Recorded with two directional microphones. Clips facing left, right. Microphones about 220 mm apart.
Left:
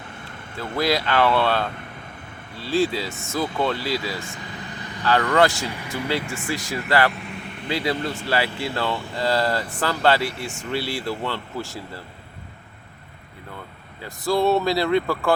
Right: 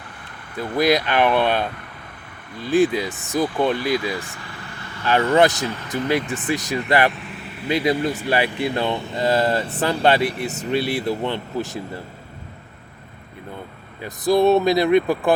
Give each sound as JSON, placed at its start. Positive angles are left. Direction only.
{"t": 0.8, "sound": "speech", "side_deg": -20}
{"t": 4.4, "sound": "vehicle", "side_deg": 20}
{"t": 5.0, "sound": "speech", "side_deg": -15}
{"t": 5.6, "sound": "speech", "side_deg": 10}
{"t": 6.1, "sound": "speech", "side_deg": -20}
{"t": 7.1, "sound": "vehicle", "side_deg": 0}
{"t": 7.7, "sound": "speech", "side_deg": -20}
{"t": 14.0, "sound": "speech", "side_deg": -20}